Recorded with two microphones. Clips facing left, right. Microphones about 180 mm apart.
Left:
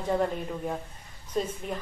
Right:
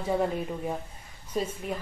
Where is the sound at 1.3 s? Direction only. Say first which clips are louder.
Even; 10° right (ahead or behind).